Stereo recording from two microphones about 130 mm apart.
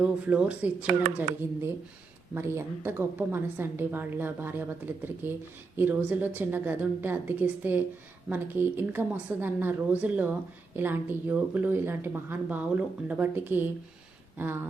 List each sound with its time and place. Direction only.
0.0 s speech: 10° right (ahead or behind)
1.4 s speech: 20° right (ahead or behind)